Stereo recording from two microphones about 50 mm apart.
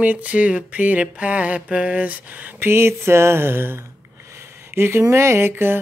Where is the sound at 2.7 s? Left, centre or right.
Right.